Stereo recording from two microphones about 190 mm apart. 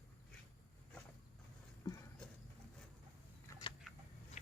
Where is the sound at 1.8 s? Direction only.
20° left (ahead or behind).